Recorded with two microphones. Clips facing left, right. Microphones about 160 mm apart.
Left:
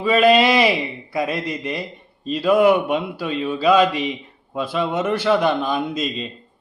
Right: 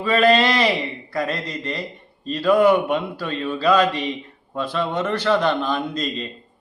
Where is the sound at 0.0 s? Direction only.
10° left (ahead or behind).